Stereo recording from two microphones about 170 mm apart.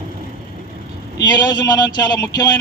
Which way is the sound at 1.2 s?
25° left (ahead or behind).